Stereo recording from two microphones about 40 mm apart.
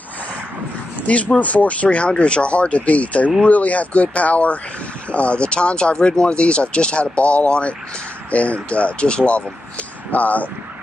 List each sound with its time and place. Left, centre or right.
1.0 s speech: left
10.1 s speech: left